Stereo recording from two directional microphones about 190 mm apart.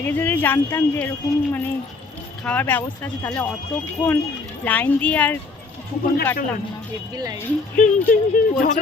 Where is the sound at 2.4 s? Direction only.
10° left (ahead or behind).